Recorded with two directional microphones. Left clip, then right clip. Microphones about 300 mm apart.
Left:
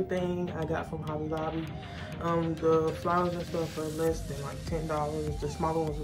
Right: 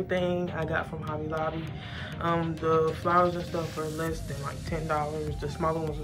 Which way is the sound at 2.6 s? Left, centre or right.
Centre.